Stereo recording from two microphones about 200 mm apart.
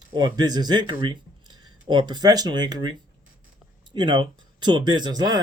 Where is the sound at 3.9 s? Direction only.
25° right (ahead or behind).